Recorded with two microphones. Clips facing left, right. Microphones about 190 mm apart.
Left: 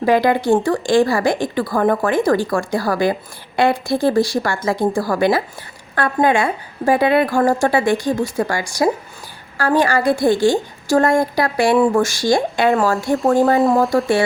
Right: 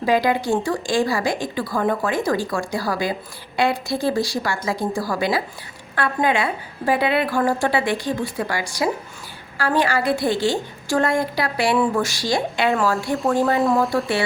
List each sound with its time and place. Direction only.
0.0 s a woman's voice: 55° left (ahead or behind)